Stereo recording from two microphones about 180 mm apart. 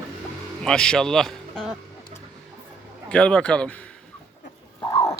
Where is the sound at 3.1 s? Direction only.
5° left (ahead or behind).